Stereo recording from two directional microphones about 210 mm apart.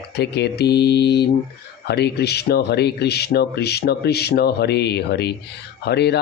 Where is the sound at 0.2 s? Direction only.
55° left (ahead or behind).